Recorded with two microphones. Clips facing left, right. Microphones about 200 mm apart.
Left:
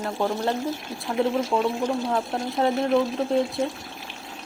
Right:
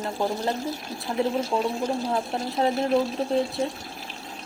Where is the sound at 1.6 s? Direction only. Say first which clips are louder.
Left 2 dB; 35° right (ahead or behind).